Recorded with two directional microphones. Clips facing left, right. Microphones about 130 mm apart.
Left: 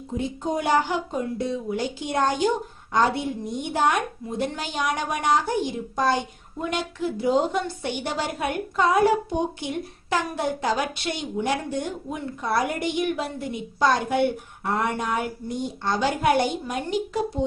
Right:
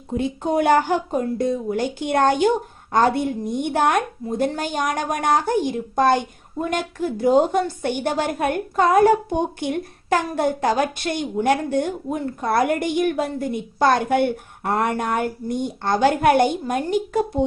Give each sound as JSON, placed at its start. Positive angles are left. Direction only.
{"t": 0.1, "sound": "a woman's voice", "side_deg": -65}